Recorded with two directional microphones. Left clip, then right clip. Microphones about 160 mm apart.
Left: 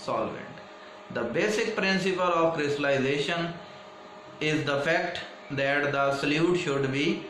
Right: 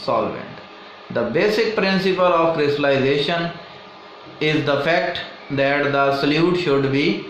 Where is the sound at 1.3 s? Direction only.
30° right (ahead or behind).